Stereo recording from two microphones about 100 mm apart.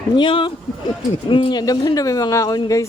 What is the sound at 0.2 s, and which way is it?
Music, 55° left (ahead or behind).